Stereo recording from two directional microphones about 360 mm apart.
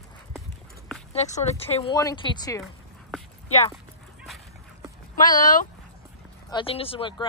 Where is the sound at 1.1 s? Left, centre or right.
Centre.